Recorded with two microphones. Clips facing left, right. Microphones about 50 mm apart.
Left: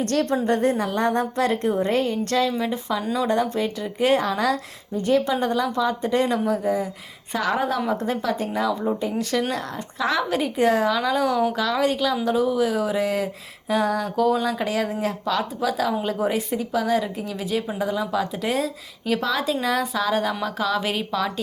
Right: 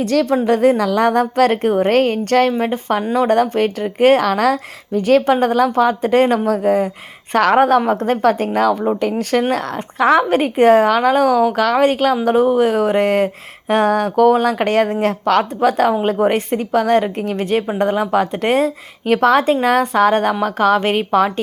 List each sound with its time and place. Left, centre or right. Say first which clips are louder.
0.4 s a woman's voice: right 7 dB; right
2.5 s a woman's voice: right 7 dB; right
3.2 s speech: right 8 dB; right
16.1 s a woman's voice: right 7 dB; right